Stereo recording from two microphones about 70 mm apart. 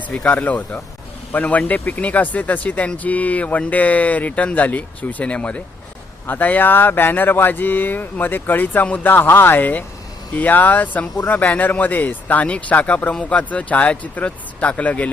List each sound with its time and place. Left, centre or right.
0.1 s speech: centre